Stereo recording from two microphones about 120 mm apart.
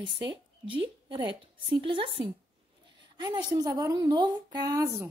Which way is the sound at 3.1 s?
35° right (ahead or behind).